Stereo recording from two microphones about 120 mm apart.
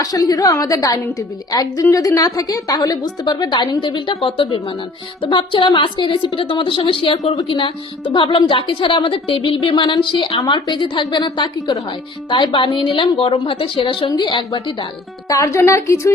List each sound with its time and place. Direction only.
0.0 s a woman's voice: 30° left (ahead or behind)
15.3 s a woman's voice: 25° left (ahead or behind)